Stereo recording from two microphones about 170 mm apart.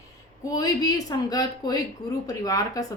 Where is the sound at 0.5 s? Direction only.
20° left (ahead or behind).